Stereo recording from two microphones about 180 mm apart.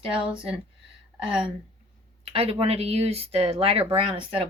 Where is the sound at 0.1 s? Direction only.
5° right (ahead or behind).